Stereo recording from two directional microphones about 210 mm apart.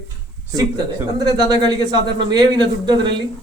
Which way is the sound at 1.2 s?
20° right (ahead or behind).